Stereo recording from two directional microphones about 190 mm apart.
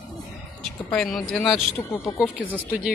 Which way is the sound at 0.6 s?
5° left (ahead or behind).